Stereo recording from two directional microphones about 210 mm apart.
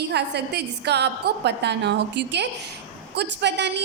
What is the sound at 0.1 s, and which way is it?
A woman's voice, 55° right (ahead or behind).